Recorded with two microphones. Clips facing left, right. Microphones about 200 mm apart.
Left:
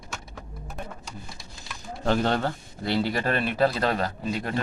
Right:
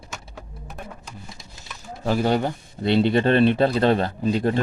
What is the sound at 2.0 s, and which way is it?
Speech, 5° right (ahead or behind).